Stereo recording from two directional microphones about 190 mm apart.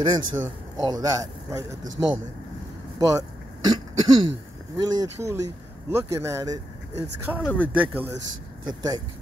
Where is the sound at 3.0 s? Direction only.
20° right (ahead or behind).